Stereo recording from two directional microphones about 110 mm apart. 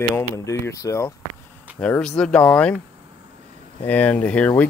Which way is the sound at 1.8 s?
10° left (ahead or behind).